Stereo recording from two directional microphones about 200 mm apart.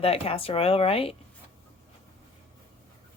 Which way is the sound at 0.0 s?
30° left (ahead or behind).